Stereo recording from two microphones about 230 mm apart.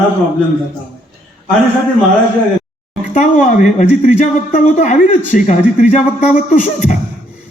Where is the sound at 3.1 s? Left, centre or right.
Left.